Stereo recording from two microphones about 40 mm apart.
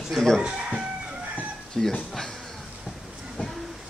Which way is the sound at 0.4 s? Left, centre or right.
Right.